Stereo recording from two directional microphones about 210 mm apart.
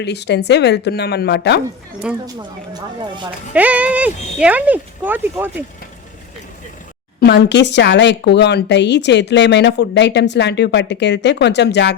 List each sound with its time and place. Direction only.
0.0 s a woman's voice: 55° left (ahead or behind)
2.2 s speech: 20° right (ahead or behind)
3.5 s speech: 5° right (ahead or behind)
7.2 s speech: 50° left (ahead or behind)